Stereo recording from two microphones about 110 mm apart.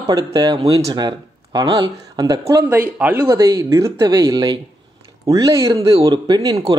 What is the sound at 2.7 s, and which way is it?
Speech, 20° right (ahead or behind).